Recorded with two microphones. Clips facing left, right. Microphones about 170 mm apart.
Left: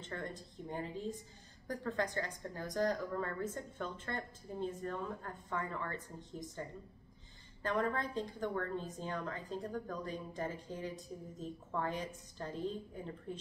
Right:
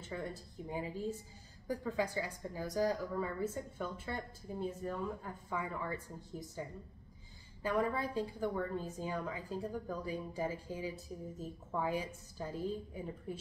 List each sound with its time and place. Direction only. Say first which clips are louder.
0.0 s a woman's voice: right 1 dB; 10° right (ahead or behind)